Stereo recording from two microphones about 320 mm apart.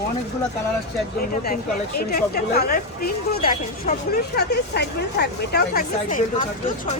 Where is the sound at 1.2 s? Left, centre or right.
Left.